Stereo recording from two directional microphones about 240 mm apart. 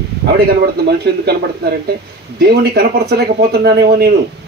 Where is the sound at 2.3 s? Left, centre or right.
Right.